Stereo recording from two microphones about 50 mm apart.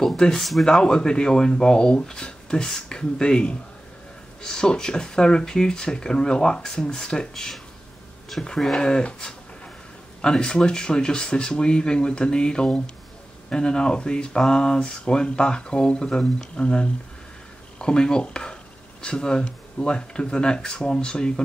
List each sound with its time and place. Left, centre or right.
0.0 s speech: centre